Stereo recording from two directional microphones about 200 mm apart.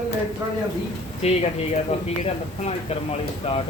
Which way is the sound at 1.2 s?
30° left (ahead or behind).